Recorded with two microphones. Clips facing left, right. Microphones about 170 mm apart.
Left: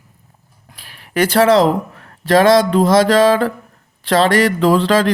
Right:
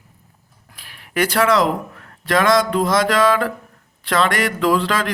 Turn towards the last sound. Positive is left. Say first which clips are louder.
# left 5 dB
turn(degrees=30)  # may be behind; listen again after turning